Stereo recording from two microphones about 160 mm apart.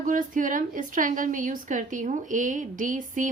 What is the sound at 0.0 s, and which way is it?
A woman's voice, 55° right (ahead or behind).